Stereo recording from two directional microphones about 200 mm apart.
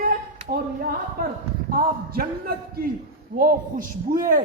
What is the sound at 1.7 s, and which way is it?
Speech, 45° right (ahead or behind).